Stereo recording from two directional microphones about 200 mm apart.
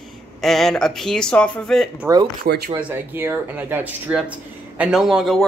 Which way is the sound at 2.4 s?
50° right (ahead or behind).